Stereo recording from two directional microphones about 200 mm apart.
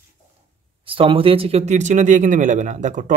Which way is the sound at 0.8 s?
25° right (ahead or behind).